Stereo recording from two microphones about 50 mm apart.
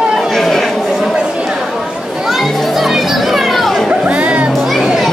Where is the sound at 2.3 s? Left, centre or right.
Centre.